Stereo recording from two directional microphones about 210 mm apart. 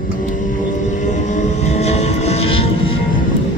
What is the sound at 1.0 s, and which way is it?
Vehicle, 35° left (ahead or behind).